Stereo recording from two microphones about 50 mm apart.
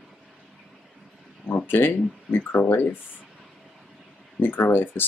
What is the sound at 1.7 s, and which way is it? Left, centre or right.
Speech, left.